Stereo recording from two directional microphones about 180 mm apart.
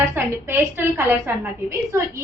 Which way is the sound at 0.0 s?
15° right (ahead or behind).